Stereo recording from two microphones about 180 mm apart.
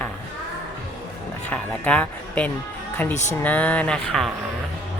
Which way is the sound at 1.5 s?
10° left (ahead or behind).